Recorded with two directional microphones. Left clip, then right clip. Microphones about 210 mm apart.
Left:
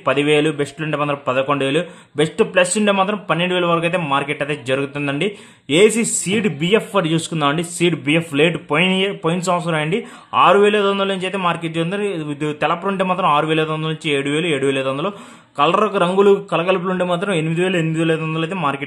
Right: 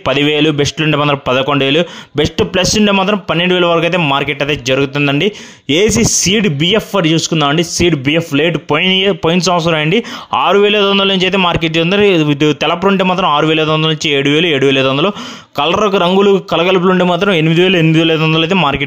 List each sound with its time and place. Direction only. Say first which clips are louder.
0.1 s a man's voice: right 4 dB; 35° right (ahead or behind)